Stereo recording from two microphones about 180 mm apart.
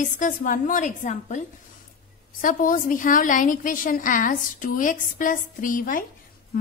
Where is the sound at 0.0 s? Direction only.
45° left (ahead or behind).